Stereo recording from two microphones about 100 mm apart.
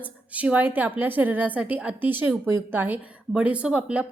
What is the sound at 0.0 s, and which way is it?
A woman's voice, 15° right (ahead or behind).